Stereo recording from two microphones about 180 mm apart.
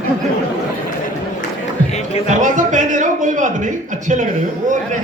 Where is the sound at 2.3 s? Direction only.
45° right (ahead or behind).